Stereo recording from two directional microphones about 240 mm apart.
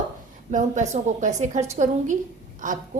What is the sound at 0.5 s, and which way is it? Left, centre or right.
A woman's voice, right.